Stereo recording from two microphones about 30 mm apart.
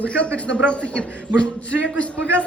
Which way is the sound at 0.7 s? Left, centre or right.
Left.